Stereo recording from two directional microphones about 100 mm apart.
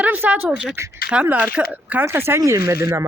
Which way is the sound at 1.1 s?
15° right (ahead or behind).